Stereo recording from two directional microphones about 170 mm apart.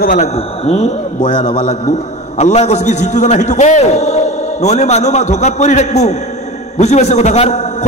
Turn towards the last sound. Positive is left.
turn(degrees=40)  # may be behind; listen again after turning